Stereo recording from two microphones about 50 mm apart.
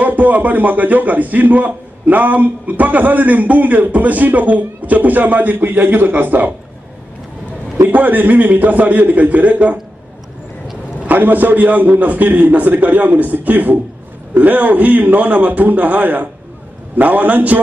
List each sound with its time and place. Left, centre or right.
0.0 s a man's voice: right
7.9 s a man's voice: right
11.1 s a man's voice: right